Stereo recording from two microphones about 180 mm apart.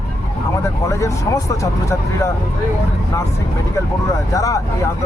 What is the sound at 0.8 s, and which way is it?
Speech, 15° left (ahead or behind).